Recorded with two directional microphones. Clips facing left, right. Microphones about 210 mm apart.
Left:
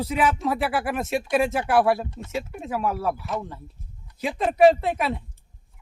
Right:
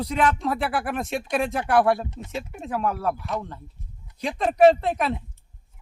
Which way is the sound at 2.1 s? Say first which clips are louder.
Even; 20° right (ahead or behind).